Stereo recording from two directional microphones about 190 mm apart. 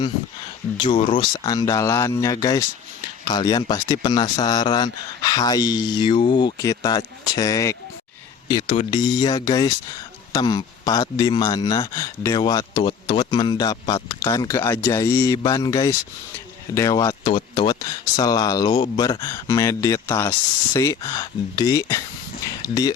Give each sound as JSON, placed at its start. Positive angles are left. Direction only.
{"t": 0.8, "sound": "speech", "side_deg": 25}